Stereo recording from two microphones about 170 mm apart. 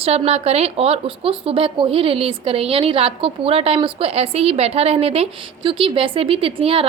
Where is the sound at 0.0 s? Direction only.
40° right (ahead or behind).